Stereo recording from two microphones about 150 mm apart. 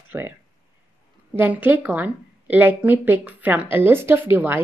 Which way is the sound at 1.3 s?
10° right (ahead or behind).